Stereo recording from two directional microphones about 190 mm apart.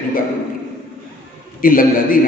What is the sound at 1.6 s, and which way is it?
Speech, 50° left (ahead or behind).